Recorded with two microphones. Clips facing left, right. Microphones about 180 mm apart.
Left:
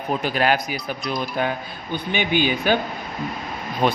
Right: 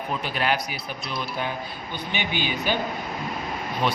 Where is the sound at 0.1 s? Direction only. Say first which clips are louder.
Left 6 dB; 45° left (ahead or behind).